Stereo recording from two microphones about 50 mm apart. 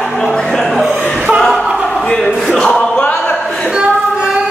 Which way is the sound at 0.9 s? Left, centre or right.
Centre.